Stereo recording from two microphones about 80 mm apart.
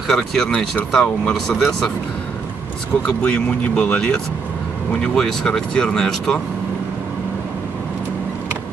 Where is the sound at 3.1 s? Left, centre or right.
Centre.